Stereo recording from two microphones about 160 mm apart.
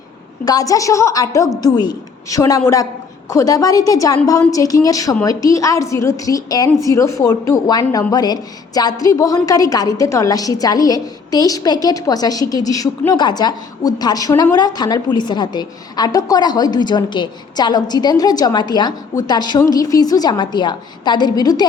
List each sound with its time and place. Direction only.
0.4 s a woman's voice: 20° left (ahead or behind)